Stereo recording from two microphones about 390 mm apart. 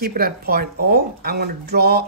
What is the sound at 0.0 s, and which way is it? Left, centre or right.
Speech, right.